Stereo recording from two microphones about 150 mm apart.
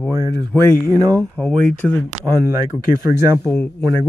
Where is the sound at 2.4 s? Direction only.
20° right (ahead or behind).